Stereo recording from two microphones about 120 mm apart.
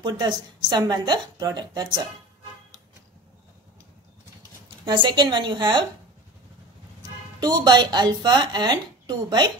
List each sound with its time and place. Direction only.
0.0 s speech: 35° right (ahead or behind)
4.4 s speech: 40° right (ahead or behind)
7.3 s speech: 35° right (ahead or behind)